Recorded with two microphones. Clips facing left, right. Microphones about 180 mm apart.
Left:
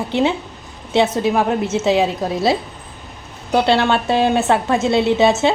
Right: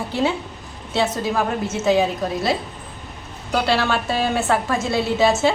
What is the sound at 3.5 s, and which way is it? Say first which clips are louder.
A woman's voice: left 5 dB; 20° left (ahead or behind).